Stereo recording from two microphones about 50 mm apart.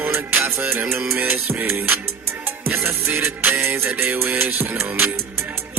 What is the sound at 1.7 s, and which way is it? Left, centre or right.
Music, right.